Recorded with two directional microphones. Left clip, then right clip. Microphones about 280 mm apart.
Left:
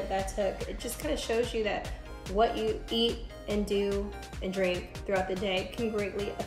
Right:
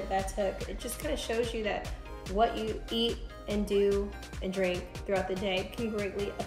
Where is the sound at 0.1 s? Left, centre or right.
Centre.